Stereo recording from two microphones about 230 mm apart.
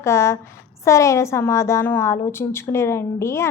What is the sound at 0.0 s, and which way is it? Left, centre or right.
A woman's voice, centre.